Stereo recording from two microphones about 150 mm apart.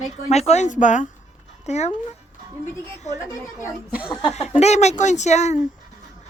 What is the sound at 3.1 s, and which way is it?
Speech, 50° left (ahead or behind).